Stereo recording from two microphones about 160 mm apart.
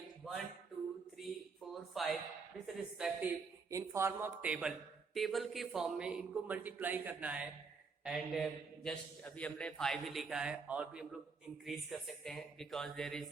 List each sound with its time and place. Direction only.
0.2 s a sound: centre (ahead or behind)
2.6 s a man's voice: 5° right (ahead or behind)
3.7 s a man's voice: 20° right (ahead or behind); by 13.3 s centre (ahead or behind)